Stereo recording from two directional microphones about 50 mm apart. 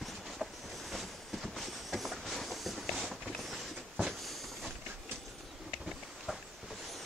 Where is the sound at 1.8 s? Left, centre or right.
Centre.